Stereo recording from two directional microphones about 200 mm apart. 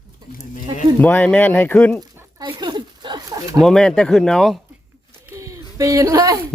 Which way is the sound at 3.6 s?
Centre (ahead or behind).